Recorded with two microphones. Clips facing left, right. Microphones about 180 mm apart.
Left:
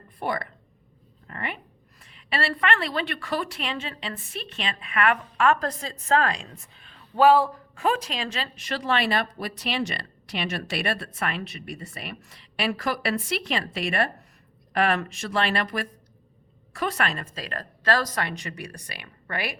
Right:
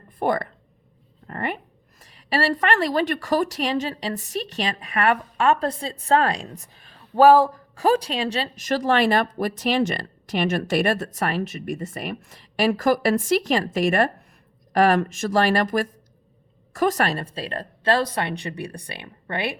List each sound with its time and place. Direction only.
0.2 s speech: 50° right (ahead or behind); by 19.5 s 25° right (ahead or behind)